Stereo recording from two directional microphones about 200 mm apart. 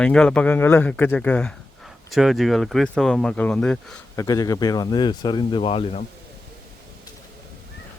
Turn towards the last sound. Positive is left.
turn(degrees=30)  # may be behind; listen again after turning